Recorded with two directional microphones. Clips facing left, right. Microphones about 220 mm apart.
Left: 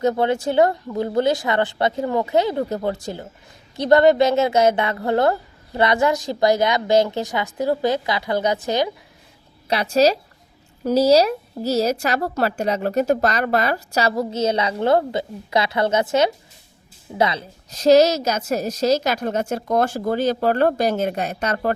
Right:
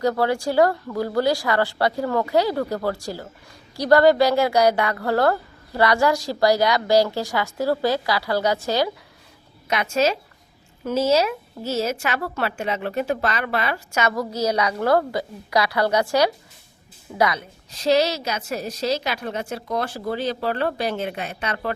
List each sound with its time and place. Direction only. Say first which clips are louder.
0.0 s speech: left 2 dB; 20° left (ahead or behind)
9.6 s a woman's voice: left 4 dB; 35° left (ahead or behind)
17.7 s a woman's voice: left 6 dB; 45° left (ahead or behind)